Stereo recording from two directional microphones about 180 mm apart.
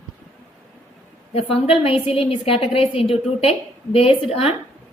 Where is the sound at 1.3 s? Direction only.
30° left (ahead or behind).